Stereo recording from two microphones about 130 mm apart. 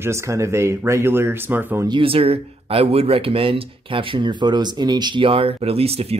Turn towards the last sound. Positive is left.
turn(degrees=-50)  # may be behind; listen again after turning